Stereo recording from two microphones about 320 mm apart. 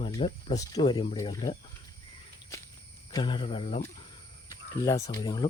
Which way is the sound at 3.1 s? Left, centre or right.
Centre.